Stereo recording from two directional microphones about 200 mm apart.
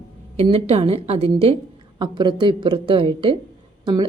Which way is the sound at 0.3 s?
30° right (ahead or behind).